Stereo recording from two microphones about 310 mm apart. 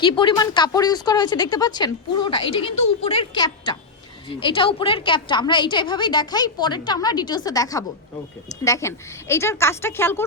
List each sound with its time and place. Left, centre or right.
0.0 s a woman's voice: centre